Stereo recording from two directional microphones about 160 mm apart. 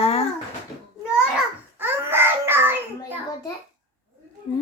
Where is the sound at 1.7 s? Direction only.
15° right (ahead or behind).